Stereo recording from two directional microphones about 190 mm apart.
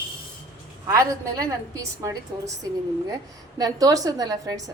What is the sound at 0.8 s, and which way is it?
A woman's voice, 20° right (ahead or behind).